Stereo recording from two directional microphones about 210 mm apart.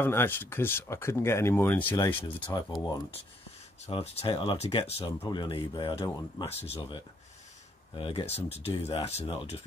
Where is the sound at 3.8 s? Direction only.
30° left (ahead or behind).